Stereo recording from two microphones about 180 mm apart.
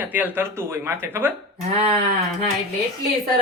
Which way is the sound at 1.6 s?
30° right (ahead or behind).